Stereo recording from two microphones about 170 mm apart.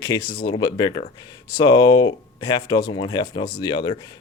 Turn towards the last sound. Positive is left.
turn(degrees=25)  # may be behind; listen again after turning